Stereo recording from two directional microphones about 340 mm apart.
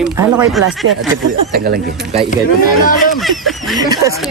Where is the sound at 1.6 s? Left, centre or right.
Right.